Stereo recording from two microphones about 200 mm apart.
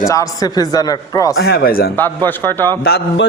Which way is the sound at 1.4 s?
50° left (ahead or behind).